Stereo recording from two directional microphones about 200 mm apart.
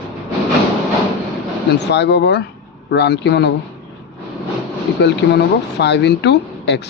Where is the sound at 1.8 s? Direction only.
60° left (ahead or behind).